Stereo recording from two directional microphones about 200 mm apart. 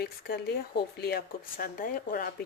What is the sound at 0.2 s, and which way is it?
Speech, 55° left (ahead or behind).